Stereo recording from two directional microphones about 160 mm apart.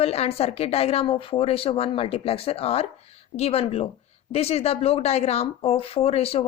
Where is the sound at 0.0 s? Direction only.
40° left (ahead or behind).